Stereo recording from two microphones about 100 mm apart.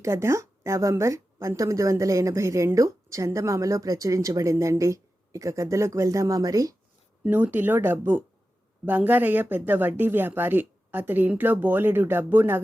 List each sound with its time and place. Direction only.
0.0 s a woman's voice: 30° right (ahead or behind)
7.3 s a woman's voice: 20° right (ahead or behind)